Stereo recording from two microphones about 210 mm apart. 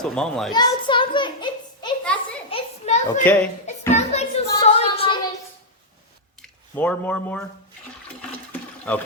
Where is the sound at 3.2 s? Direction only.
10° left (ahead or behind).